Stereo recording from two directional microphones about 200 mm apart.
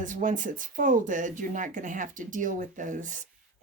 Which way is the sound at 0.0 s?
40° right (ahead or behind).